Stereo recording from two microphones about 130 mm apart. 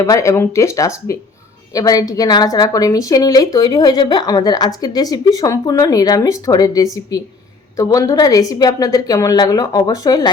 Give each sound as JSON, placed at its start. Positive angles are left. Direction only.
{"t": 0.0, "sound": "a woman's voice", "side_deg": 25}